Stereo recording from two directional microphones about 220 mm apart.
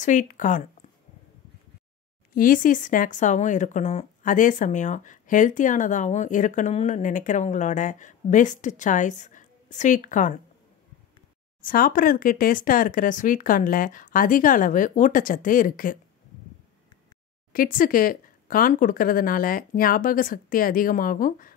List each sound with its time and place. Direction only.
0.0 s speech: 35° left (ahead or behind)
2.3 s speech: 40° left (ahead or behind)
11.6 s speech: 40° left (ahead or behind)
17.5 s speech: 40° left (ahead or behind)